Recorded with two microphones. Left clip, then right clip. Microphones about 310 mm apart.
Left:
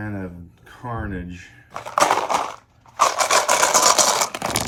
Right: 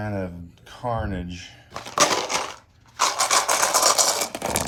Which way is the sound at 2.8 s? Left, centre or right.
Left.